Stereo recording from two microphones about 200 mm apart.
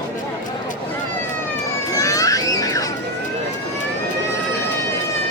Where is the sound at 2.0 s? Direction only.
15° left (ahead or behind).